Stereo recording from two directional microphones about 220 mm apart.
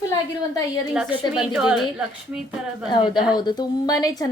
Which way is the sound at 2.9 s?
20° left (ahead or behind).